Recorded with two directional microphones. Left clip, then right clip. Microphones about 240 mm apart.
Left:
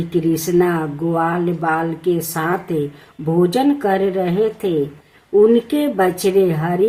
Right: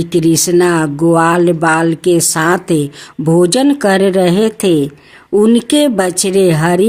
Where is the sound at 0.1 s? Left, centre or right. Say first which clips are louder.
Right 6 dB; right.